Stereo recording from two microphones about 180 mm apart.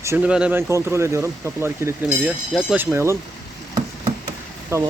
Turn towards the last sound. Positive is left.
turn(degrees=-15)  # may be behind; listen again after turning